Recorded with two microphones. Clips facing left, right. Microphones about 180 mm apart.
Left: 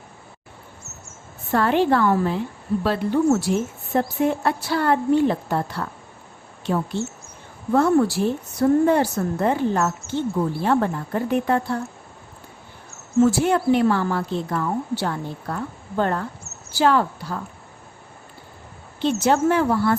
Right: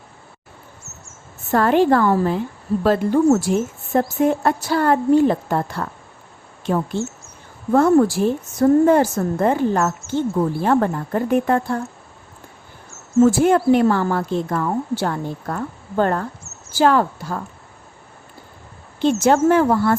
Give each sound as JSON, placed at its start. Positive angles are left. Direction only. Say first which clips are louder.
{"t": 1.5, "sound": "a woman's voice", "louder": "right 3 dB", "side_deg": -45}
{"t": 13.2, "sound": "a woman's voice", "louder": "right 5 dB", "side_deg": -50}
{"t": 18.9, "sound": "a woman's voice", "louder": "right 4 dB", "side_deg": -50}